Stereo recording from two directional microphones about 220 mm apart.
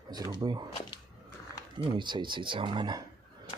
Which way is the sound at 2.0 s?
20° right (ahead or behind).